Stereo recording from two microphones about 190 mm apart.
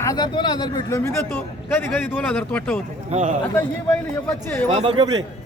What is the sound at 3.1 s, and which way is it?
Speech, 40° right (ahead or behind).